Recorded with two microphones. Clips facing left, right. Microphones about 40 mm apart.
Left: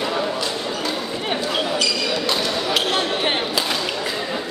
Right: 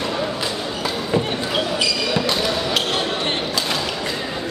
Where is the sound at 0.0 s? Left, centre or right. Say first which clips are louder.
Left 1 dB; centre.